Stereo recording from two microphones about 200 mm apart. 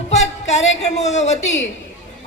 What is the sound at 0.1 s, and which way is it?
A woman's voice, 35° left (ahead or behind).